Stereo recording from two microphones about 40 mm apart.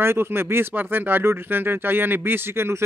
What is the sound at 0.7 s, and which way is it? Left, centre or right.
Speech, right.